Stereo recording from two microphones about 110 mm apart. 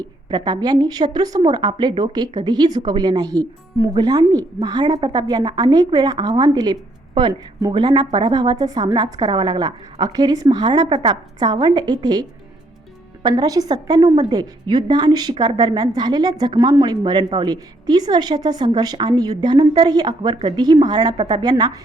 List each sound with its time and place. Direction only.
0.0 s a woman's voice: 40° right (ahead or behind)
13.2 s a woman's voice: 40° right (ahead or behind)